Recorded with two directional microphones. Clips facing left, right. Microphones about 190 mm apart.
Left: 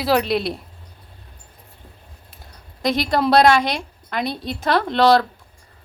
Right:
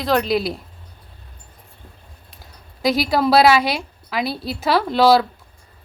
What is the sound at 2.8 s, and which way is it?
A woman's voice, 5° right (ahead or behind).